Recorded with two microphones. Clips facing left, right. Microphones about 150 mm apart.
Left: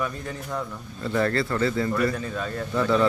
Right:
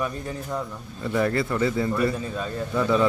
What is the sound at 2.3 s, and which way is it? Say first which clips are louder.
Speech: even; 10° right (ahead or behind).